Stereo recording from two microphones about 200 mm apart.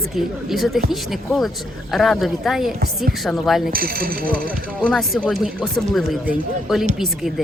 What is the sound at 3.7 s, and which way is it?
Speech, 45° right (ahead or behind).